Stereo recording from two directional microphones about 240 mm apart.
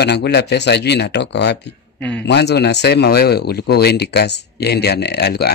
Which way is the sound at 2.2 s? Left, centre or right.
Left.